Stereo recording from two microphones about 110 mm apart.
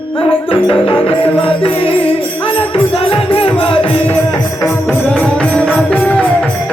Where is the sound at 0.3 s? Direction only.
55° left (ahead or behind).